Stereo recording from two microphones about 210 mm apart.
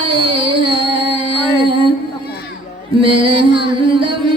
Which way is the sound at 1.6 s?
25° right (ahead or behind).